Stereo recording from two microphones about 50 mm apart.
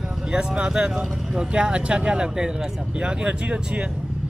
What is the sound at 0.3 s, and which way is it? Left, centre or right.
Speech, centre.